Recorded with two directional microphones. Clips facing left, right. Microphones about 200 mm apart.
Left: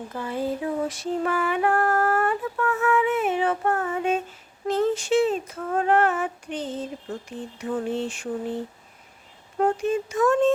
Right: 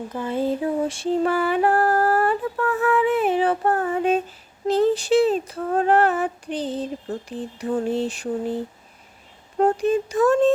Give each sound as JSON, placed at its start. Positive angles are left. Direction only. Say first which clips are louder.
{"t": 0.1, "sound": "female singing", "louder": "right 4 dB", "side_deg": -25}
{"t": 9.6, "sound": "female singing", "louder": "right 4 dB", "side_deg": -35}